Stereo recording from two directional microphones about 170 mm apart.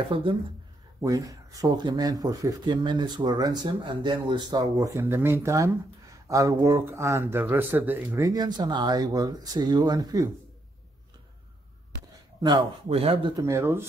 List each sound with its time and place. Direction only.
0.1 s speech: 30° right (ahead or behind)
1.0 s speech: 20° right (ahead or behind)
12.4 s speech: 25° right (ahead or behind)
13.4 s speech: 15° right (ahead or behind)